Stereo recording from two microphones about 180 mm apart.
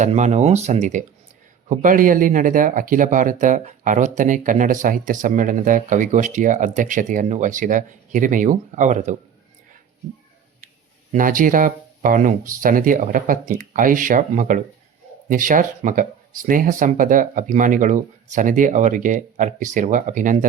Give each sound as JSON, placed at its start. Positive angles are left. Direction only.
{"t": 0.0, "sound": "speech", "side_deg": -40}
{"t": 11.1, "sound": "speech", "side_deg": -45}